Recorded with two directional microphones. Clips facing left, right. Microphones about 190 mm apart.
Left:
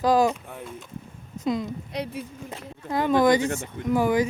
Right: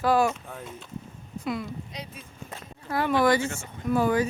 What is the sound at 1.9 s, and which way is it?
Speech, 65° left (ahead or behind).